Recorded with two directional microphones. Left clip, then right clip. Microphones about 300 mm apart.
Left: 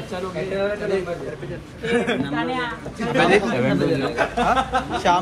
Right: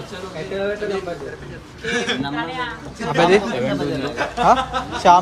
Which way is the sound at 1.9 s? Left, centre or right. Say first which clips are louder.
Even; centre.